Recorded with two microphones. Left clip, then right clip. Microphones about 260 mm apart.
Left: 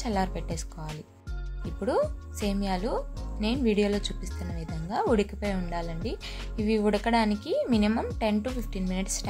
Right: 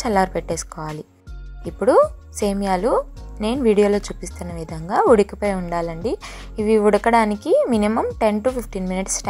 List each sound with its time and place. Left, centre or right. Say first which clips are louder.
0.0 s speech: right 11 dB; right